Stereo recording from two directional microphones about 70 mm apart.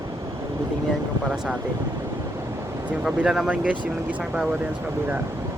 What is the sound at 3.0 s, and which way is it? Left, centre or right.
Speech, centre.